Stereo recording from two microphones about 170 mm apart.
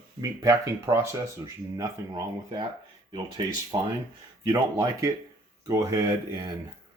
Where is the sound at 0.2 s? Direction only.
20° right (ahead or behind).